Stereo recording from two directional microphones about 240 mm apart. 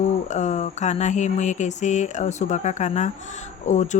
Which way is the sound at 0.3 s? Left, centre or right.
Left.